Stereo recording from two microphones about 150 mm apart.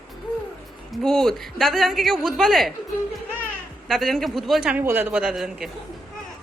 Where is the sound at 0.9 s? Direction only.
5° left (ahead or behind).